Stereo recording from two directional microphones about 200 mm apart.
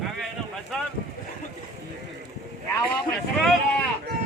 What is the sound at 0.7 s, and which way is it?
Speech, centre (ahead or behind).